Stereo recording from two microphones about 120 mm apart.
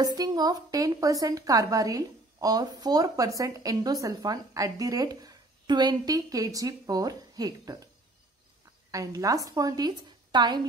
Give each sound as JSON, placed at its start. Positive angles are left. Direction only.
{"t": 0.0, "sound": "a woman's voice", "side_deg": -35}
{"t": 8.9, "sound": "a woman's voice", "side_deg": -30}